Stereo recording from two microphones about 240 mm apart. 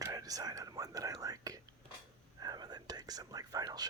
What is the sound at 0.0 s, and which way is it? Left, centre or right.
Whispering, centre.